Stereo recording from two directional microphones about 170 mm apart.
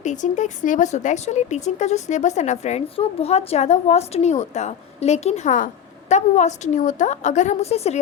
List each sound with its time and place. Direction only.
0.0 s speech: 45° left (ahead or behind)